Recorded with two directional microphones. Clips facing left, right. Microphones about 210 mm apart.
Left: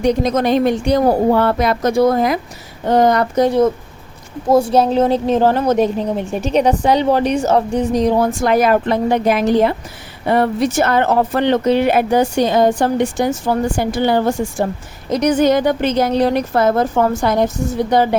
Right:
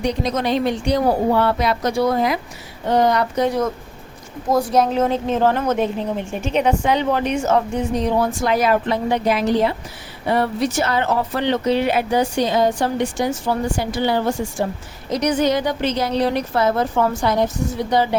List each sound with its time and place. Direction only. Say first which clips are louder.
0.0 s speech: left 6 dB; 50° left (ahead or behind)
4.4 s a woman's voice: left 4 dB; 30° left (ahead or behind); by 18.2 s 50° left (ahead or behind)